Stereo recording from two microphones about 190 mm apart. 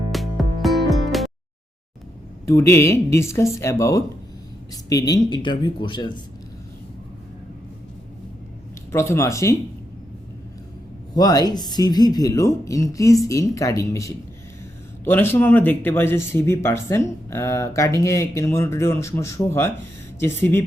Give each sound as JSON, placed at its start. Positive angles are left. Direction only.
{"t": 0.1, "sound": "music", "side_deg": 0}
{"t": 2.5, "sound": "speech", "side_deg": 15}
{"t": 8.9, "sound": "speech", "side_deg": 15}
{"t": 11.1, "sound": "speech", "side_deg": 20}